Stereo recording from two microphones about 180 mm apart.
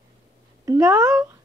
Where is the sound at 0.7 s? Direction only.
20° right (ahead or behind).